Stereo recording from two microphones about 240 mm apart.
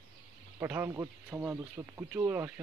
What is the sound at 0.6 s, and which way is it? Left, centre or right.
Speech, centre.